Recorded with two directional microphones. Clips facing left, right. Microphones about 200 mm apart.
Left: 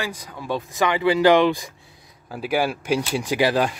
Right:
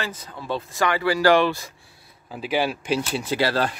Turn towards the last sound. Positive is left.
turn(degrees=15)  # may be behind; listen again after turning